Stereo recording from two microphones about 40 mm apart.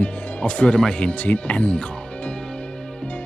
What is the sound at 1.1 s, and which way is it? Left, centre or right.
Speech, left.